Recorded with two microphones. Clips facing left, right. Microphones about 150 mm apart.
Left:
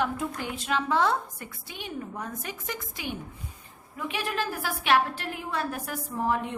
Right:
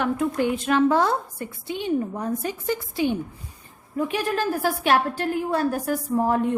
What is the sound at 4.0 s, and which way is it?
A woman's voice, 40° right (ahead or behind).